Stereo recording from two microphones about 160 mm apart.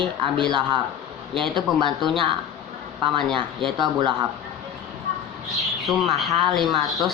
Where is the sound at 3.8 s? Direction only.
30° right (ahead or behind).